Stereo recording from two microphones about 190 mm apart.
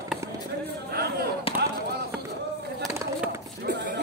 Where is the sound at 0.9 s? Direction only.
55° right (ahead or behind).